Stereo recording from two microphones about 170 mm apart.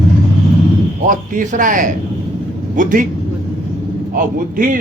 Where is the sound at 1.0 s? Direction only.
50° right (ahead or behind).